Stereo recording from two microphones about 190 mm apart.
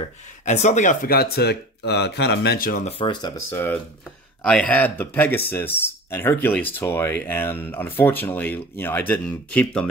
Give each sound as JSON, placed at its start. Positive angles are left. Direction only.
{"t": 0.5, "sound": "speech", "side_deg": 40}
{"t": 3.0, "sound": "speech", "side_deg": 20}